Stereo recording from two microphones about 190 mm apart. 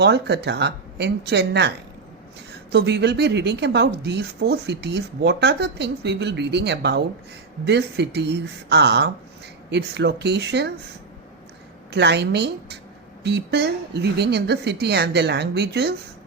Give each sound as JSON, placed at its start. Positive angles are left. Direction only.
{"t": 0.0, "sound": "speech", "side_deg": -60}
{"t": 2.7, "sound": "speech", "side_deg": -60}
{"t": 11.9, "sound": "speech", "side_deg": -65}